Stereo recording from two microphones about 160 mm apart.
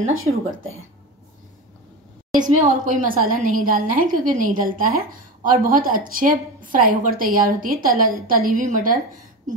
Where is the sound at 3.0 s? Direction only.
60° right (ahead or behind).